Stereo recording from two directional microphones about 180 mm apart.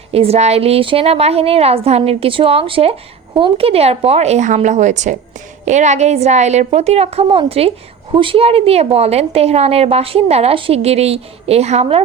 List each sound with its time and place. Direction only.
0.1 s a woman's voice: 35° right (ahead or behind)